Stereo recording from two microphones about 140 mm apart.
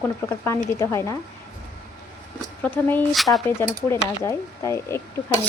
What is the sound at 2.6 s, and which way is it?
Speech, 10° left (ahead or behind).